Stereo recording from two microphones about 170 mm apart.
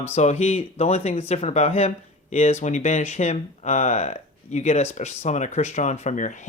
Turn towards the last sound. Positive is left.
turn(degrees=45)  # may be behind; listen again after turning